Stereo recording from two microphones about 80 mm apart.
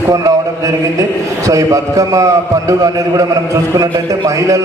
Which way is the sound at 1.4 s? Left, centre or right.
Right.